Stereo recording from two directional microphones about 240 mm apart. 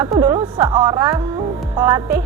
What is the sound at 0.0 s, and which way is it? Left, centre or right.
Speech, centre.